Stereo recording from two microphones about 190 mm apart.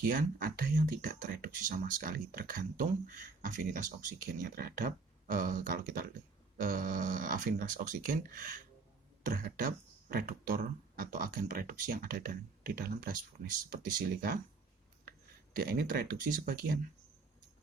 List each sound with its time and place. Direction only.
0.0 s speech: 50° right (ahead or behind)
15.5 s speech: 50° right (ahead or behind)